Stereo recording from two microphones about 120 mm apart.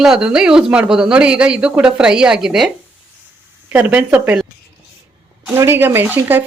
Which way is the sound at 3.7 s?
15° right (ahead or behind).